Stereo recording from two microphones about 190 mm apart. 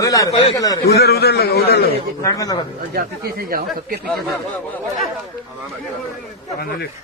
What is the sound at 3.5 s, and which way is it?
Speech, 50° right (ahead or behind).